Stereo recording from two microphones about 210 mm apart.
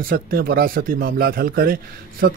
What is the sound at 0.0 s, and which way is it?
Speech, 45° right (ahead or behind).